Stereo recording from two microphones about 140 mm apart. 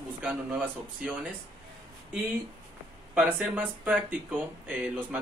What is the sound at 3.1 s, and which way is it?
Speech, 10° right (ahead or behind).